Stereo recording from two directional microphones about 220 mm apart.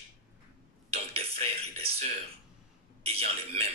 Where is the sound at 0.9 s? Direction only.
25° right (ahead or behind).